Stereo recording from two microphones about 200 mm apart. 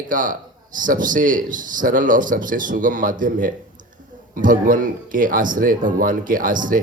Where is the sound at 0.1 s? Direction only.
40° right (ahead or behind).